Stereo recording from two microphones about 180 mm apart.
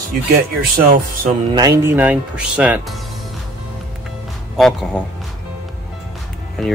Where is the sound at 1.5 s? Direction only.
20° right (ahead or behind).